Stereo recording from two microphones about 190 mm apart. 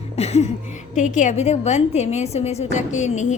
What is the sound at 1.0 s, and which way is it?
A woman's voice, 40° left (ahead or behind).